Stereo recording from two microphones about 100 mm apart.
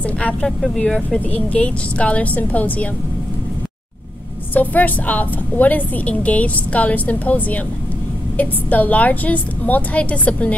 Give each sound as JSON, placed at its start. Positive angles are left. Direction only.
{"t": 0.0, "sound": "a woman's voice", "side_deg": 15}
{"t": 4.6, "sound": "a woman's voice", "side_deg": 15}